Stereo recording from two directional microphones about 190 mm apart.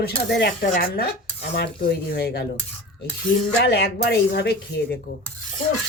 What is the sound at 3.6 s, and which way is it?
Speech, 60° left (ahead or behind).